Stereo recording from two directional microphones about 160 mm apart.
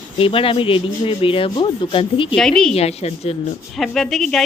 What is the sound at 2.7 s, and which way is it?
Speech, 40° left (ahead or behind).